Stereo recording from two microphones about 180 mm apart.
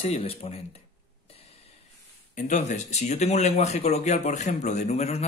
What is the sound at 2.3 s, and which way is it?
Speech, 40° left (ahead or behind).